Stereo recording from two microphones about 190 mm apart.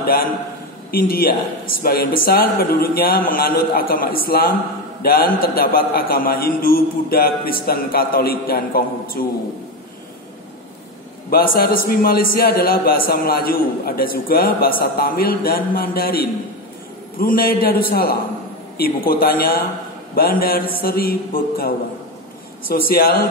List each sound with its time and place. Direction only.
0.0 s a man's voice: 50° left (ahead or behind)
11.2 s a man's voice: 50° left (ahead or behind)